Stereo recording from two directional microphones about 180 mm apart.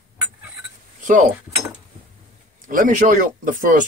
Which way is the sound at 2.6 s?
45° right (ahead or behind).